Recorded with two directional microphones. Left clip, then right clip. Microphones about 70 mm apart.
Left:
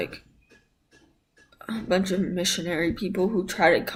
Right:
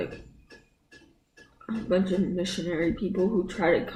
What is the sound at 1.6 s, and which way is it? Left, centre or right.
Speech, left.